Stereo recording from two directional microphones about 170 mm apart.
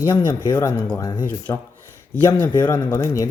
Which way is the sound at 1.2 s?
10° left (ahead or behind).